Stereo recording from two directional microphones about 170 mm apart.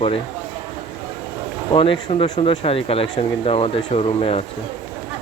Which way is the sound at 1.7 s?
30° left (ahead or behind).